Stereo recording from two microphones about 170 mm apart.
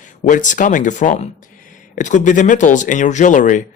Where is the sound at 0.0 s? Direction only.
50° left (ahead or behind).